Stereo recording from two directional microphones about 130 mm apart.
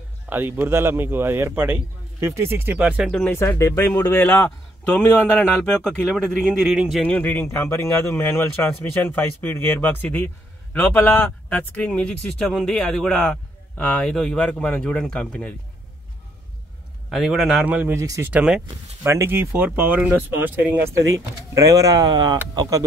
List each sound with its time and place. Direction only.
0.3 s a man's voice: 15° right (ahead or behind)
3.1 s speech: 10° left (ahead or behind)
3.3 s speech: 20° left (ahead or behind)
4.2 s speech: 10° left (ahead or behind)
7.1 s speech: 15° left (ahead or behind)
17.1 s a man's voice: centre (ahead or behind)
17.6 s a man's voice: 15° right (ahead or behind)
18.0 s speech: 25° right (ahead or behind)
18.3 s a man's voice: 5° right (ahead or behind)
19.0 s speech: 20° right (ahead or behind)